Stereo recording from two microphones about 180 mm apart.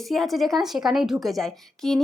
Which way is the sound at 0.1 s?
Centre (ahead or behind).